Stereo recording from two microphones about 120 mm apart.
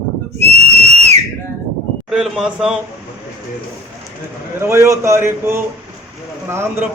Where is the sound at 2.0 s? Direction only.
Centre (ahead or behind).